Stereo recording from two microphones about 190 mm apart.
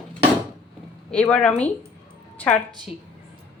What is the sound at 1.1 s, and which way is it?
Speech, 5° left (ahead or behind).